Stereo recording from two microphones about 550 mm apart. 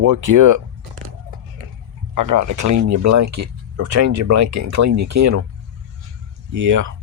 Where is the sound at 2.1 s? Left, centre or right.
Right.